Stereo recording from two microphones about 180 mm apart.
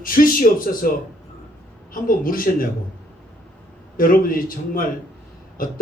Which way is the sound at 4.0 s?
50° left (ahead or behind).